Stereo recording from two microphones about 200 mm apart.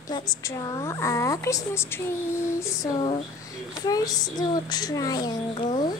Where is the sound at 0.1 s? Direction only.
15° left (ahead or behind).